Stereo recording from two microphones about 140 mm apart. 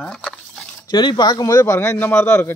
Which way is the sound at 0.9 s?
30° left (ahead or behind).